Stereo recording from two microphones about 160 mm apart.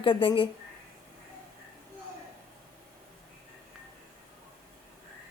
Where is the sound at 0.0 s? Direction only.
30° left (ahead or behind).